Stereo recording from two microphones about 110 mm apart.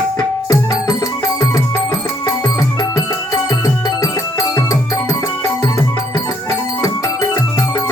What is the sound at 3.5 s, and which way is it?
Music, 35° left (ahead or behind).